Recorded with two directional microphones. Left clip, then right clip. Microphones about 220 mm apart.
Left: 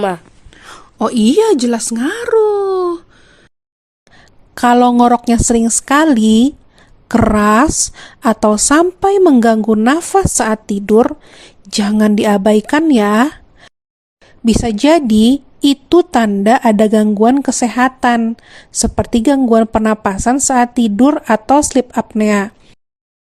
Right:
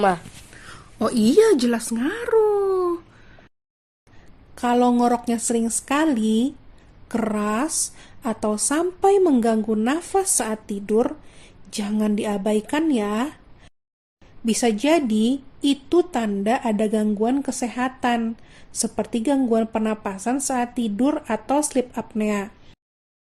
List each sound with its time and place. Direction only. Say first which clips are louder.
0.9 s a woman's voice: left 5 dB; 35° left (ahead or behind)
4.5 s a woman's voice: left 10 dB; 40° left (ahead or behind)